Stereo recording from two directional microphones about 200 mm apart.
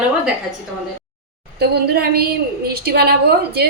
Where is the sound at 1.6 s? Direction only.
50° right (ahead or behind).